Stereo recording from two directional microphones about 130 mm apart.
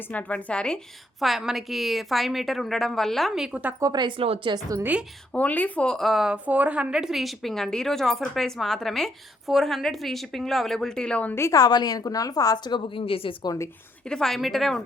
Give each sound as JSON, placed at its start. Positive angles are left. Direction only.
{"t": 0.1, "sound": "a woman's voice", "side_deg": 10}
{"t": 3.8, "sound": "speech", "side_deg": -30}
{"t": 4.2, "sound": "a woman's voice", "side_deg": -45}
{"t": 4.8, "sound": "a woman's voice", "side_deg": -10}
{"t": 5.3, "sound": "a woman's voice", "side_deg": 10}
{"t": 13.4, "sound": "a woman's voice", "side_deg": 25}
{"t": 14.0, "sound": "a woman's voice", "side_deg": 5}